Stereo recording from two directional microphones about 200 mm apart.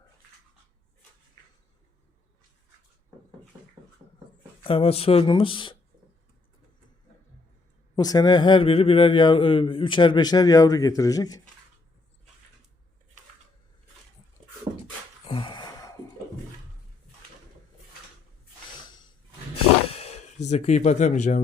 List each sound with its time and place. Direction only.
4.6 s speech: 30° left (ahead or behind)
7.9 s speech: 20° left (ahead or behind)
15.3 s gasp: 25° left (ahead or behind)
20.4 s speech: 35° left (ahead or behind)